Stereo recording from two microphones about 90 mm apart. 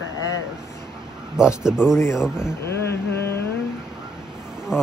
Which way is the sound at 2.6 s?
30° left (ahead or behind).